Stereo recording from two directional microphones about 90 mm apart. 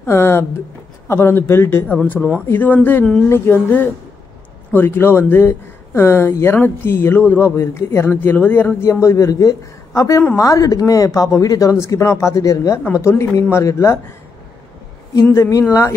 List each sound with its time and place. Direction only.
0.0 s speech: 30° left (ahead or behind)
2.1 s speech: 10° right (ahead or behind)
2.4 s speech: 20° left (ahead or behind)
9.0 s a woman's voice: 35° left (ahead or behind)